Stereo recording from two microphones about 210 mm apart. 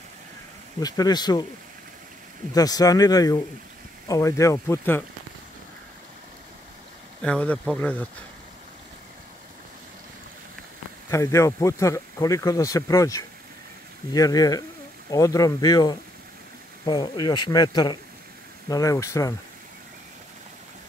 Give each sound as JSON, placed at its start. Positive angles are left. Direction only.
{"t": 0.7, "sound": "speech", "side_deg": 20}
{"t": 2.5, "sound": "speech", "side_deg": 15}
{"t": 7.2, "sound": "speech", "side_deg": 5}
{"t": 11.1, "sound": "speech", "side_deg": 15}